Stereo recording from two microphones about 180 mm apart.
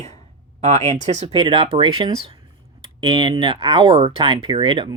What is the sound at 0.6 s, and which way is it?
Speech, 35° right (ahead or behind).